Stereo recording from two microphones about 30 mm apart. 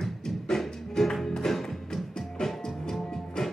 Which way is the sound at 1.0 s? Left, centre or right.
Left.